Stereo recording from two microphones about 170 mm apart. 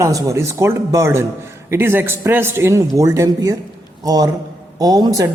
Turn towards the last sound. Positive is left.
turn(degrees=-20)  # may be behind; listen again after turning